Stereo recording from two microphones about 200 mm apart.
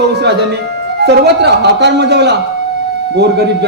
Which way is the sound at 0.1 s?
55° right (ahead or behind).